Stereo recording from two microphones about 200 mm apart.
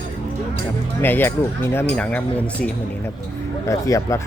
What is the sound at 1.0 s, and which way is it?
Speech, 10° left (ahead or behind).